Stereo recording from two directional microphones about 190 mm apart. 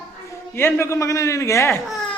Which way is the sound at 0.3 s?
15° left (ahead or behind).